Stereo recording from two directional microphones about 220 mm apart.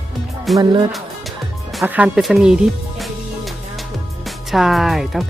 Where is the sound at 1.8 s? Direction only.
5° right (ahead or behind).